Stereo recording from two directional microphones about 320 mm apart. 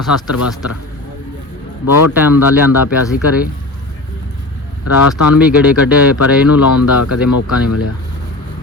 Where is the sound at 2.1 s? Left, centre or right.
Centre.